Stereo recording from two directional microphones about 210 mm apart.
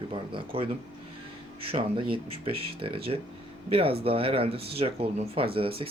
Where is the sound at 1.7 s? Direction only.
25° right (ahead or behind).